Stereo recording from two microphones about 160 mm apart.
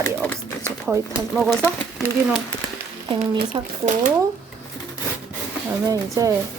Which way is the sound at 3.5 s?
35° right (ahead or behind).